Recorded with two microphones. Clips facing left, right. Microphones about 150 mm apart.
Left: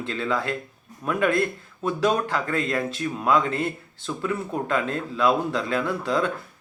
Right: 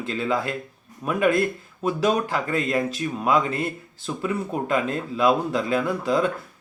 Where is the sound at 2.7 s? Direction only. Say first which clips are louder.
Right 2 dB; 15° right (ahead or behind).